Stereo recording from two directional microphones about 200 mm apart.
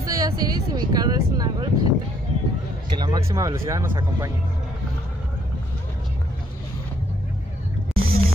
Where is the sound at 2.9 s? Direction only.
20° right (ahead or behind).